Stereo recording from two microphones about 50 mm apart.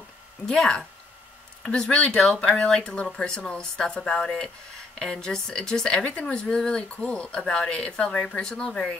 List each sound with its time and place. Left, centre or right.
0.5 s speech: centre